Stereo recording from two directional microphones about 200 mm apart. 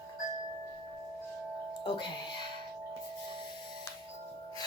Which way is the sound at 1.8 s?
20° left (ahead or behind).